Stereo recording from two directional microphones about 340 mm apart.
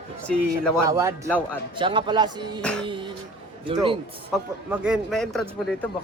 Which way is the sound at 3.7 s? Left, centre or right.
Centre.